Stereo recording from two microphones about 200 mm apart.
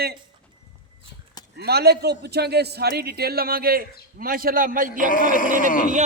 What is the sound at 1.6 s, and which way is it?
A man's voice, 55° right (ahead or behind).